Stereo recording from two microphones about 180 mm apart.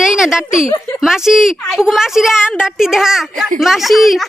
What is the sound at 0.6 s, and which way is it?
Speech, 15° left (ahead or behind).